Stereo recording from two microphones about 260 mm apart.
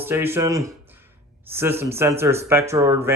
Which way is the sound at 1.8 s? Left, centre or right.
Centre.